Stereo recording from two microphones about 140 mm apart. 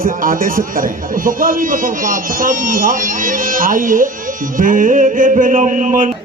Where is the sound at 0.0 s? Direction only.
80° right.